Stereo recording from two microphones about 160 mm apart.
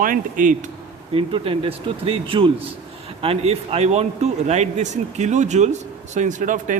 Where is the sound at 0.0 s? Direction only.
55° right (ahead or behind).